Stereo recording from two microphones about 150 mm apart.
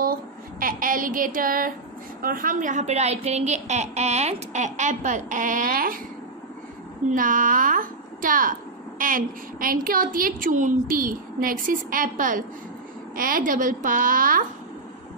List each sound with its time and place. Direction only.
0.0 s a sound: 75° right (ahead or behind)
2.2 s a woman's voice: 65° right (ahead or behind)
7.1 s a woman's voice: 65° right (ahead or behind)